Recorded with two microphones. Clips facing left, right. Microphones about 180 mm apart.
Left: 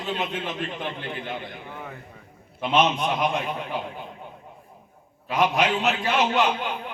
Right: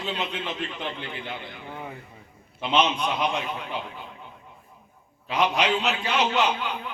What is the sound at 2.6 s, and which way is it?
A man's voice, 50° left (ahead or behind).